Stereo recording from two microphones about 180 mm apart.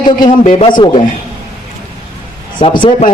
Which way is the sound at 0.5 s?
30° left (ahead or behind).